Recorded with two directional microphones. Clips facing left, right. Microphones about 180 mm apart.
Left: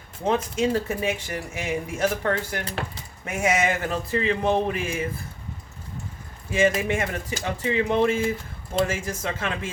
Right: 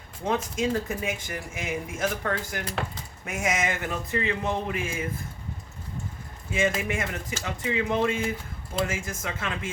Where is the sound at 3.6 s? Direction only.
30° left (ahead or behind).